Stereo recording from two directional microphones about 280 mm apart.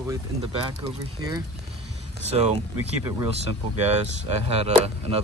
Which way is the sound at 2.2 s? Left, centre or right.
Right.